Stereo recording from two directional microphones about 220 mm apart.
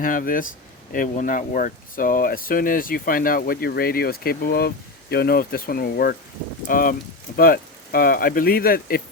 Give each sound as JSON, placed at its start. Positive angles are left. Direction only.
{"t": 0.0, "sound": "speech", "side_deg": 40}